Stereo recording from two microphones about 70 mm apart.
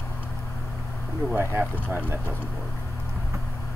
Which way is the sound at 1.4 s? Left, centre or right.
Right.